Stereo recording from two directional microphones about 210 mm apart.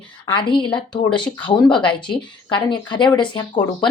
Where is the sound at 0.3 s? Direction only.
25° left (ahead or behind).